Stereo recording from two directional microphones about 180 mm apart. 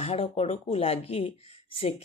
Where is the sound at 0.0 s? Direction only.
35° left (ahead or behind).